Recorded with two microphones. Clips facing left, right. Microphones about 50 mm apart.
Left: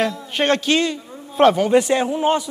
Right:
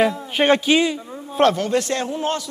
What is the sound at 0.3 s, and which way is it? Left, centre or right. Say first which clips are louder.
A man's voice: even; centre.